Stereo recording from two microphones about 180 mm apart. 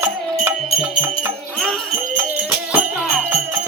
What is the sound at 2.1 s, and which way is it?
Music, 10° right (ahead or behind).